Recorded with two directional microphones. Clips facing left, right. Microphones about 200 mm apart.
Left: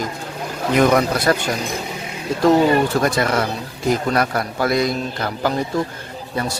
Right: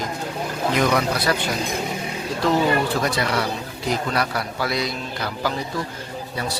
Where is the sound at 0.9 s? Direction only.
45° left (ahead or behind).